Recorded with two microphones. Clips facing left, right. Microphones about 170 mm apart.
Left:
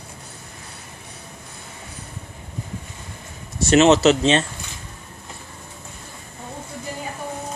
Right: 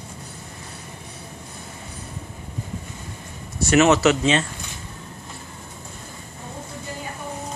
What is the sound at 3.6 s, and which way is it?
Speech, 25° left (ahead or behind).